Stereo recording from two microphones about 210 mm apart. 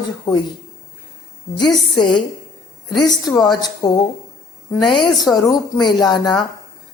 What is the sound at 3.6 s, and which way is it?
A woman's voice, 20° left (ahead or behind).